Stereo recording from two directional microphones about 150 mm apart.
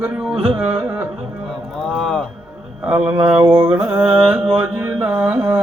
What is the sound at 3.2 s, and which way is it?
Mantra, 35° right (ahead or behind).